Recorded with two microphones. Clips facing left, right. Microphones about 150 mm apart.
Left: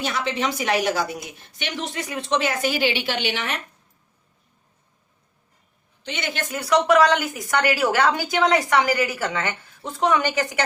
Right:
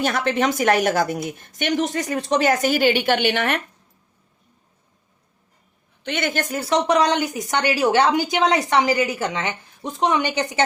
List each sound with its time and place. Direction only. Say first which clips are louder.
0.0 s a woman's voice: right 4 dB; 50° right (ahead or behind)
6.0 s a woman's voice: right 6 dB; 55° right (ahead or behind)
6.5 s a woman's voice: left 2 dB; 30° right (ahead or behind)